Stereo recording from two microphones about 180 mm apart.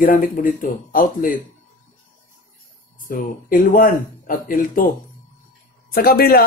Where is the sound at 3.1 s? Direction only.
50° left (ahead or behind).